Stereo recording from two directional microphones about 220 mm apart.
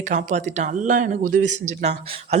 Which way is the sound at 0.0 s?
35° right (ahead or behind).